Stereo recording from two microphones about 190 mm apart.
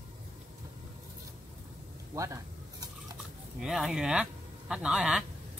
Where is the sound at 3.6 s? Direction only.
Centre (ahead or behind).